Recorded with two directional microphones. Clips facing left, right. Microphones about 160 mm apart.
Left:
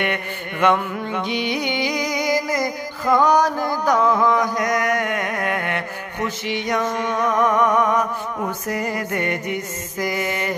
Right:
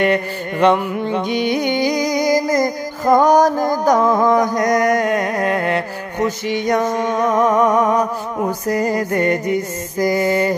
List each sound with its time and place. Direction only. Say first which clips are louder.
0.0 s music: right 8 dB; 30° right (ahead or behind)
1.3 s music: right 6 dB; 45° right (ahead or behind)